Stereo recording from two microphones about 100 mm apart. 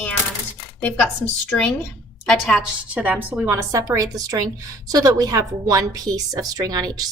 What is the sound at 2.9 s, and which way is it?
Speech, 15° right (ahead or behind).